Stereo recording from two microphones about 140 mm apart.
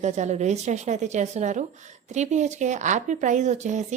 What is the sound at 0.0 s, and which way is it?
A woman's voice, 55° right (ahead or behind).